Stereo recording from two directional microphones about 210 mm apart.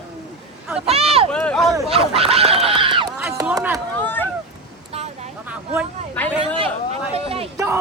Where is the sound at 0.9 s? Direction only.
30° right (ahead or behind).